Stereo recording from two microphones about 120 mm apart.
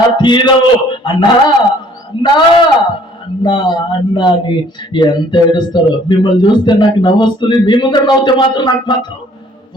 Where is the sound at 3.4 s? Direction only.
40° left (ahead or behind).